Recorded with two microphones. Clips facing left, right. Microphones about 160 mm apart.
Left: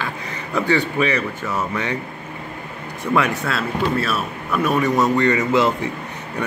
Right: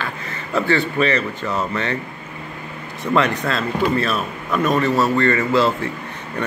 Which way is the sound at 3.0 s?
10° left (ahead or behind).